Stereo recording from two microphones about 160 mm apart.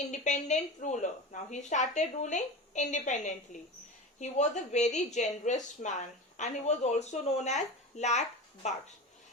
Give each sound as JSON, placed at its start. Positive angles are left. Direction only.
{"t": 0.1, "sound": "a woman's voice", "side_deg": 50}